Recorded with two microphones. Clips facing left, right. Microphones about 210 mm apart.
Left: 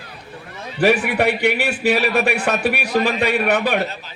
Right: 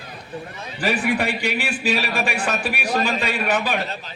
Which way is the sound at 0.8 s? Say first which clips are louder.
Left 5 dB; 70° left (ahead or behind).